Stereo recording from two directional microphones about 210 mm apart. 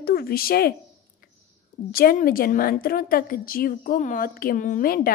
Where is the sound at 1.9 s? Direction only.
45° left (ahead or behind).